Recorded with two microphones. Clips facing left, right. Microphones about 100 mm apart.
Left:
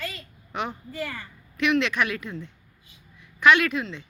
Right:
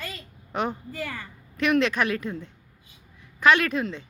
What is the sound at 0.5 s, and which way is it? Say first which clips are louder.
A woman's voice: right 2 dB; 40° right (ahead or behind).